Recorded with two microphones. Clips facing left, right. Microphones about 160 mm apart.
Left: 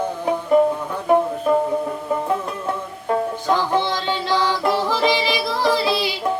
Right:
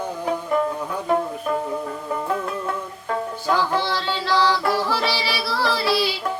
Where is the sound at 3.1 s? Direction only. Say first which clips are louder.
Left 3 dB; 20° left (ahead or behind).